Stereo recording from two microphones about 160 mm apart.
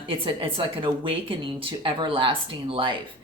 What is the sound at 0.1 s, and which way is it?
Speech, 35° right (ahead or behind).